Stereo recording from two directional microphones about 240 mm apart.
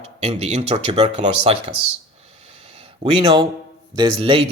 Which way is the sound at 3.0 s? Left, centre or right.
Right.